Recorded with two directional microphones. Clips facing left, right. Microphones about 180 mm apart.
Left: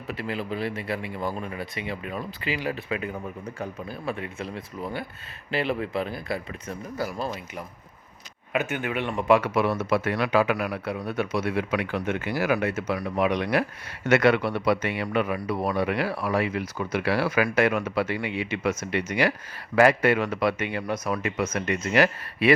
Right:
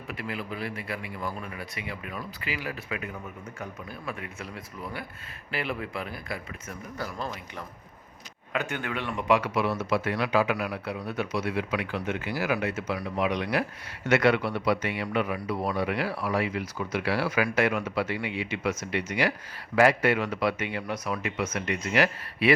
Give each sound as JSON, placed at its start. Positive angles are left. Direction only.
{"t": 0.1, "sound": "speech", "side_deg": 30}
{"t": 8.5, "sound": "speech", "side_deg": 15}
{"t": 9.1, "sound": "speech", "side_deg": 45}